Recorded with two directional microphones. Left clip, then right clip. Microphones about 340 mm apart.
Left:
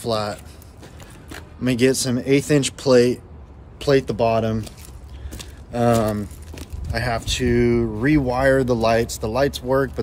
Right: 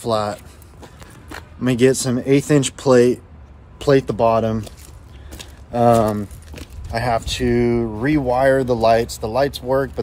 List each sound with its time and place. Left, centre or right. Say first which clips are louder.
0.0 s speech: right 3 dB; centre
1.6 s speech: right 3 dB; centre
5.3 s a sound: right 4 dB; centre
6.9 s speech: right 4 dB; centre